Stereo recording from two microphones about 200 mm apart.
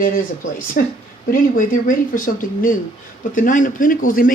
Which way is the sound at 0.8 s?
45° left (ahead or behind).